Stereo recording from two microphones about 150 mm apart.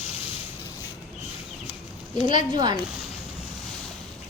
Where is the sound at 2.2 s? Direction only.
30° right (ahead or behind).